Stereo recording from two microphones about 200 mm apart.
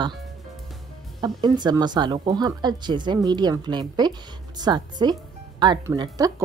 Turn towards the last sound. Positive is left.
turn(degrees=-20)  # may be behind; listen again after turning